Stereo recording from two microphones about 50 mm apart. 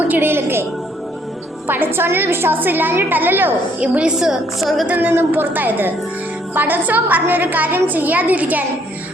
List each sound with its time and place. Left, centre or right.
0.1 s a woman's voice: right
1.6 s a woman's voice: right
3.8 s a woman's voice: right
4.2 s a woman's voice: centre
4.9 s a woman's voice: right